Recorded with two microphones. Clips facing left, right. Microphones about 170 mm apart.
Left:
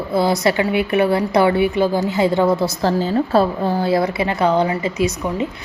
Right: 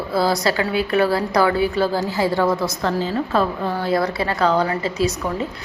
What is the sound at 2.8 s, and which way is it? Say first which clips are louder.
A woman's voice: left 4 dB; 35° left (ahead or behind).